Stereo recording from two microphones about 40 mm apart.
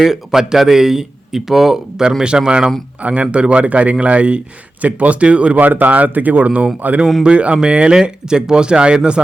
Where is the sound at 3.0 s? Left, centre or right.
Right.